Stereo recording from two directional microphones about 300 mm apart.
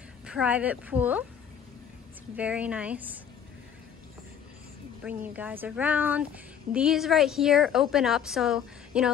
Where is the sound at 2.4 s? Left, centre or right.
Centre.